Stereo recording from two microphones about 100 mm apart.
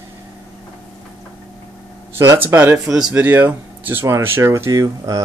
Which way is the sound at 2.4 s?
20° right (ahead or behind).